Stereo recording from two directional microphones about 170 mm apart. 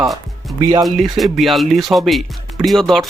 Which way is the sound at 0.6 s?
25° right (ahead or behind).